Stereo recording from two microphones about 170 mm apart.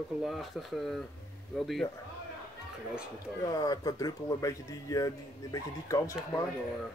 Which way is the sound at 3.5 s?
20° left (ahead or behind).